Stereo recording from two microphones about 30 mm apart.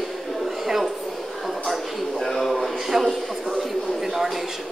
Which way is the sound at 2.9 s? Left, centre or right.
Centre.